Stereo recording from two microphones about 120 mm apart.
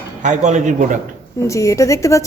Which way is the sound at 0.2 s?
85° right.